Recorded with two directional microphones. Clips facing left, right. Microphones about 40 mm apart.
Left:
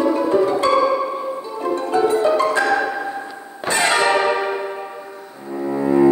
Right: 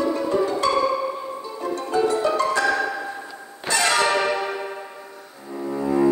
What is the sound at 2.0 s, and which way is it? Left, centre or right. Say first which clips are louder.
Music: left 5 dB; left.